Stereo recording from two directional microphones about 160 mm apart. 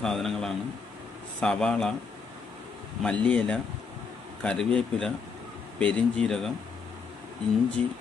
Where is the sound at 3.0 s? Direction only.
5° left (ahead or behind).